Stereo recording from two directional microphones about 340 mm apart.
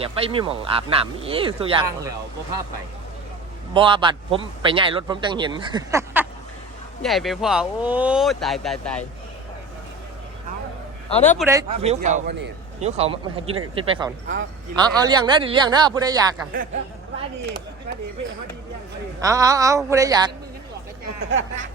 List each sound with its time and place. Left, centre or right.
0.0 s a man's voice: centre
3.8 s a man's voice: centre
11.3 s a man's voice: centre; by 12.9 s right
13.0 s a man's voice: centre
19.2 s a man's voice: centre
21.2 s speech: right